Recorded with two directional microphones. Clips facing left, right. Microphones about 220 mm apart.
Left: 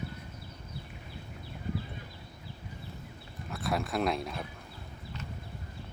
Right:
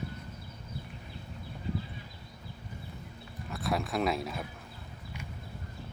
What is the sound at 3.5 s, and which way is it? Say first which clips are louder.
Speech: even; centre (ahead or behind).